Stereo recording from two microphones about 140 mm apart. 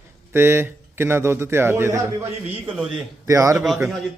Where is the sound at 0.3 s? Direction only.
15° right (ahead or behind).